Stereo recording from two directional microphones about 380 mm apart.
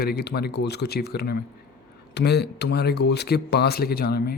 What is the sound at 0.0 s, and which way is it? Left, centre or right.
Speech, left.